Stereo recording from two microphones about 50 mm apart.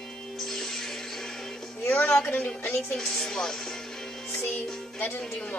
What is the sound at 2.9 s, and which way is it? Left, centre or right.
Music, centre.